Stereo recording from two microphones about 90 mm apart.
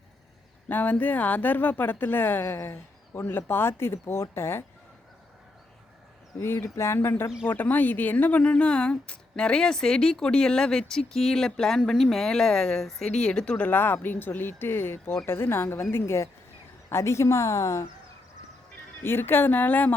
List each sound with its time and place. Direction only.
0.7 s speech: 20° left (ahead or behind)
6.4 s a woman's voice: 30° left (ahead or behind)
19.0 s speech: 25° left (ahead or behind)